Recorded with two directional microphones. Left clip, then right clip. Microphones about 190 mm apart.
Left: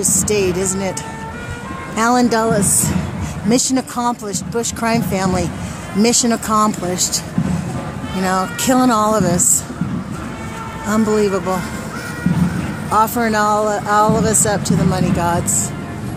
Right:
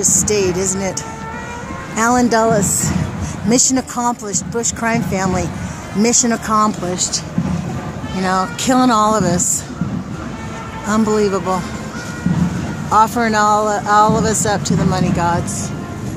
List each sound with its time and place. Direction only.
0.0 s speech: 20° left (ahead or behind)
0.3 s speech: centre (ahead or behind)
2.0 s speech: 5° left (ahead or behind)
8.2 s speech: 10° left (ahead or behind)
10.9 s speech: 5° left (ahead or behind)
12.9 s speech: 5° left (ahead or behind)